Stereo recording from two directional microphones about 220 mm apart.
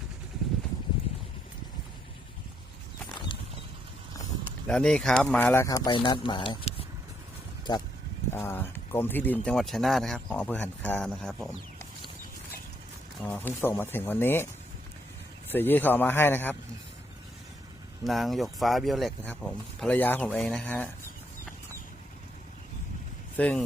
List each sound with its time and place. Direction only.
4.7 s speech: 5° left (ahead or behind)
13.2 s speech: 10° left (ahead or behind)
15.5 s speech: 10° left (ahead or behind)
18.0 s speech: centre (ahead or behind)
23.4 s speech: 5° left (ahead or behind)